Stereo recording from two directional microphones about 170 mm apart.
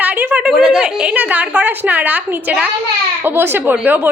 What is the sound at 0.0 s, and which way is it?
A woman's voice, 10° right (ahead or behind).